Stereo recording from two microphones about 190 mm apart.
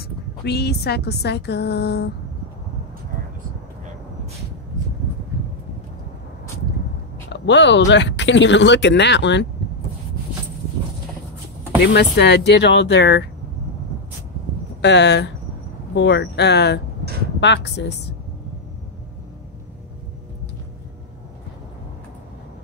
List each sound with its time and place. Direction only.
0.5 s a woman's voice: 60° left (ahead or behind)
7.3 s speech: 70° left (ahead or behind)
11.8 s a woman's voice: 60° left (ahead or behind)
14.8 s a woman's voice: 65° left (ahead or behind)